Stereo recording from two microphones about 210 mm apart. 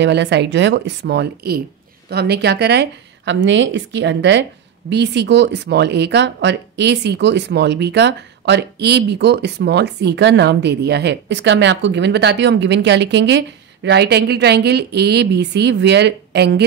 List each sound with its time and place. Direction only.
0.0 s speech: 55° right (ahead or behind)